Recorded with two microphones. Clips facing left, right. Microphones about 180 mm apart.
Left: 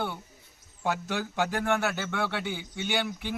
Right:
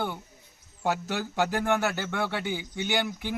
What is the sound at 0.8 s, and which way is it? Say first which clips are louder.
Speech: right 1 dB; 5° right (ahead or behind).